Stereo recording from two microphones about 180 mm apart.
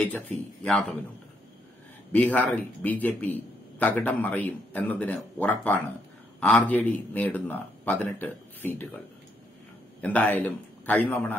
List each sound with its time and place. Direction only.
0.7 s speech: 5° left (ahead or behind)
2.1 s speech: 10° left (ahead or behind)
10.0 s speech: 10° left (ahead or behind)